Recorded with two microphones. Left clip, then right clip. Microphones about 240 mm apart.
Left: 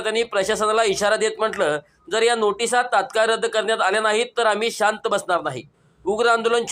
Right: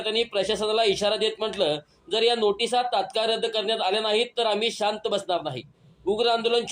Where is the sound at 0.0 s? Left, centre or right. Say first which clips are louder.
Left 4 dB; centre.